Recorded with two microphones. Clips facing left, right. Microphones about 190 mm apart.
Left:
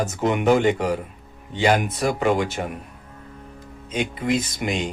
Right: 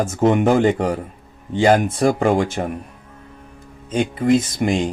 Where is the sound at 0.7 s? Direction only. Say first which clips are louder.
Right 2 dB; 40° right (ahead or behind).